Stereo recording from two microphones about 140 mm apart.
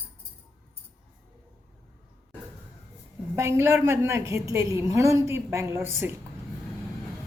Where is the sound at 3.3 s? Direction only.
20° right (ahead or behind).